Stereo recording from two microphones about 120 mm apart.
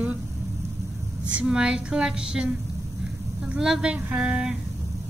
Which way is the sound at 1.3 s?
5° right (ahead or behind).